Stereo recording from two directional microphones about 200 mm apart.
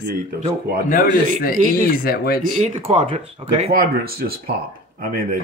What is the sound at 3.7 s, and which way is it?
Speech, 50° right (ahead or behind).